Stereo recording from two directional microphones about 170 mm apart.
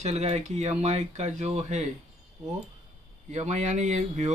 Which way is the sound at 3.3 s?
45° right (ahead or behind).